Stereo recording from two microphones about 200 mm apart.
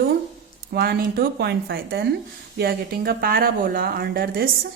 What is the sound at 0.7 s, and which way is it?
Speech, 50° right (ahead or behind).